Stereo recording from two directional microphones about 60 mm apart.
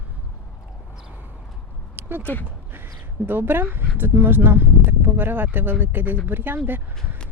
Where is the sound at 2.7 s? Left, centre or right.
Right.